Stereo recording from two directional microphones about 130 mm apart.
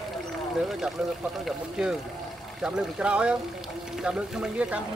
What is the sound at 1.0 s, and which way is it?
Speech, 5° right (ahead or behind).